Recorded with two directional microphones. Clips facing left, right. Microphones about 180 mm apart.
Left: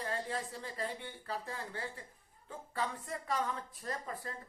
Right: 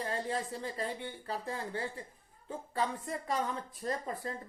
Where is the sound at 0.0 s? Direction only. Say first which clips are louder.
Right 3 dB; 25° right (ahead or behind).